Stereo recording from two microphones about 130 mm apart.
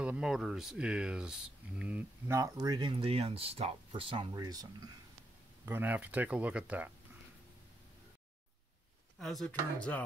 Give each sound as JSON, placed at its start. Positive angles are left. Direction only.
{"t": 0.0, "sound": "speech", "side_deg": -5}
{"t": 2.3, "sound": "speech", "side_deg": -25}
{"t": 3.0, "sound": "speech", "side_deg": -50}
{"t": 5.7, "sound": "speech", "side_deg": -15}
{"t": 9.2, "sound": "speech", "side_deg": 0}